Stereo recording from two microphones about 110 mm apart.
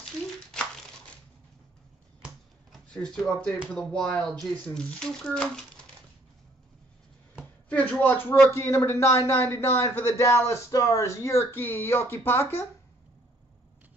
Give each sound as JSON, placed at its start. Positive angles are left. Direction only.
{"t": 2.9, "sound": "speech", "side_deg": 5}
{"t": 7.7, "sound": "speech", "side_deg": 15}